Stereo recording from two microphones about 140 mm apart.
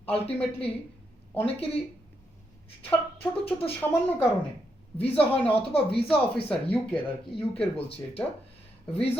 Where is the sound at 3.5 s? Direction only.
20° left (ahead or behind).